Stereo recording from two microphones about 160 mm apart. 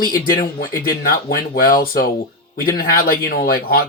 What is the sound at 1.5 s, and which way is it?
Speech, 65° left (ahead or behind).